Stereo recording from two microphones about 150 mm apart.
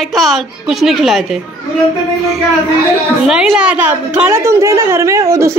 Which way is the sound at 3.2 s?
Centre (ahead or behind).